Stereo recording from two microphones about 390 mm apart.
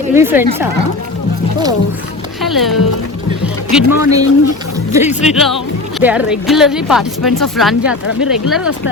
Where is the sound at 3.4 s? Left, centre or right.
Centre.